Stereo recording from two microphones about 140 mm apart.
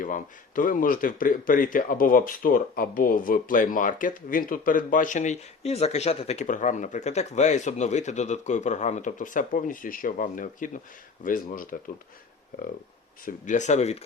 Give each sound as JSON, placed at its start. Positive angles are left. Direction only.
{"t": 0.0, "sound": "speech", "side_deg": 75}
{"t": 13.2, "sound": "speech", "side_deg": 65}